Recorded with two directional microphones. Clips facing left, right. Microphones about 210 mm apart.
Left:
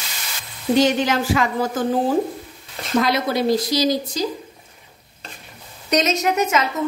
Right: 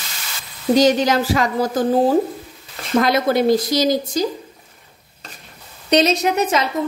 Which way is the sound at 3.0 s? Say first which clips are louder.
Right 3 dB; 50° right (ahead or behind).